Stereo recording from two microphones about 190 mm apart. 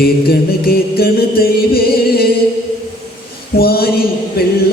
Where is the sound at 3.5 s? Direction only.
55° left (ahead or behind).